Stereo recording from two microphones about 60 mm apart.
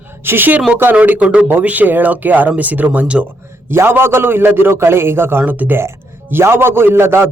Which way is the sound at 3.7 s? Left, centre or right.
Right.